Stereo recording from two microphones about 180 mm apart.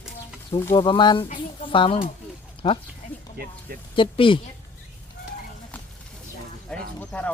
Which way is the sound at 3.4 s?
60° right (ahead or behind).